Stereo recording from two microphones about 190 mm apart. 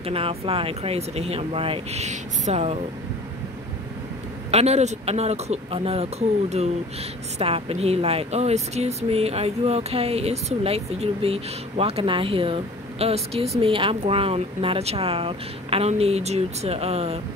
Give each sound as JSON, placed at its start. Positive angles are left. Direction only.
{"t": 0.0, "sound": "speech", "side_deg": -30}
{"t": 4.5, "sound": "speech", "side_deg": -35}